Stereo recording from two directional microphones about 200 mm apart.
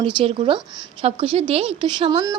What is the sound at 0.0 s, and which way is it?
Speech, 25° right (ahead or behind).